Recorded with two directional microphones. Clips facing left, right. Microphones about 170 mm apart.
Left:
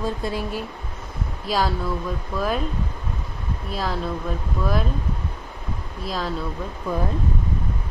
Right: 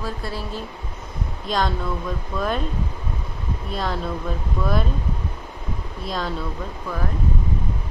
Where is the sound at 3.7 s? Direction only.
Centre (ahead or behind).